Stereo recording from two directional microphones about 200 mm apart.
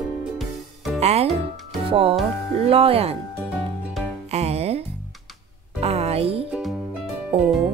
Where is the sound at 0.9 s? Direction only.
30° right (ahead or behind).